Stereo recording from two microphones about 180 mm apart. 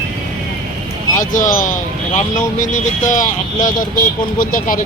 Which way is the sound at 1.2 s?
45° left (ahead or behind).